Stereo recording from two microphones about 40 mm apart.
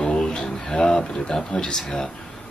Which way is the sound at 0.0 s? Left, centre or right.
Centre.